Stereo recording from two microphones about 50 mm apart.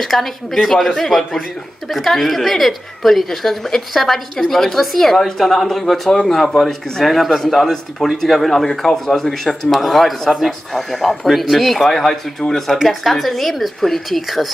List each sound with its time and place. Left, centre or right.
0.0 s a woman's voice: centre